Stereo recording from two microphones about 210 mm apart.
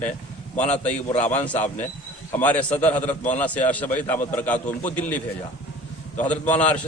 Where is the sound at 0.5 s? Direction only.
35° left (ahead or behind).